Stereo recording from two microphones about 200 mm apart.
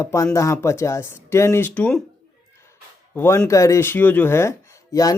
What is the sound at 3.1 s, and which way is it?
Speech, 10° left (ahead or behind).